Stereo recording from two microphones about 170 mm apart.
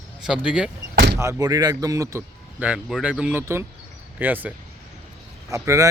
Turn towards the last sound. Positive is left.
turn(degrees=-20)  # may be behind; listen again after turning